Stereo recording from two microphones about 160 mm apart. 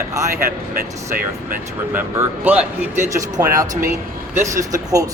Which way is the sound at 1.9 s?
10° right (ahead or behind).